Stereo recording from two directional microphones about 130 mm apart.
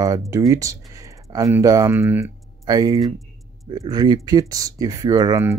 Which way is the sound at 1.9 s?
15° right (ahead or behind).